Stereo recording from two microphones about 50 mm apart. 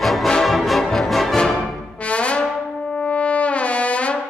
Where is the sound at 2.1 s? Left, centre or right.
Left.